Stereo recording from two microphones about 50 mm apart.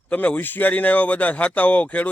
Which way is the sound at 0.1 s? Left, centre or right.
Left.